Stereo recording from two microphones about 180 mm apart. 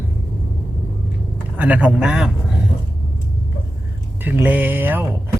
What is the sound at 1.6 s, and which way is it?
Speech, 10° right (ahead or behind).